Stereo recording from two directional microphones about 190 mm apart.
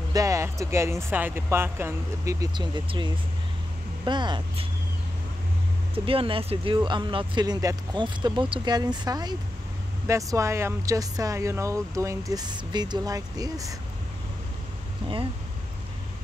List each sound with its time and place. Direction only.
0.1 s speech: 15° right (ahead or behind)
5.9 s speech: 30° right (ahead or behind)